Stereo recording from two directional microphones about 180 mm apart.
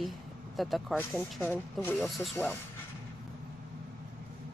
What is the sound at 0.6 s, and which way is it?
Speech, centre (ahead or behind).